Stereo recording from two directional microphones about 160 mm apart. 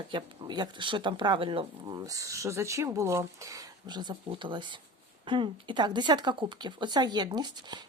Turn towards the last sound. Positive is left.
turn(degrees=-25)  # may be behind; listen again after turning